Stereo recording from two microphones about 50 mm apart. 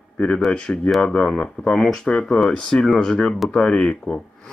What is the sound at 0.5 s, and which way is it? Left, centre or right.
Speech, centre.